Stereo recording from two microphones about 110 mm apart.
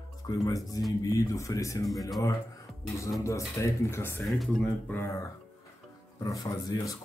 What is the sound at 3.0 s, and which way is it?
Speech, 25° left (ahead or behind).